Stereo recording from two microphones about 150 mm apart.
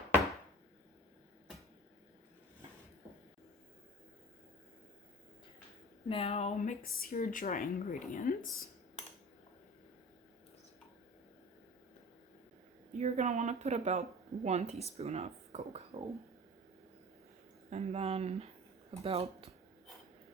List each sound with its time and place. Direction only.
6.1 s speech: 40° left (ahead or behind); by 8.6 s 70° left (ahead or behind)
12.9 s speech: 50° right (ahead or behind)
17.7 s speech: 45° right (ahead or behind)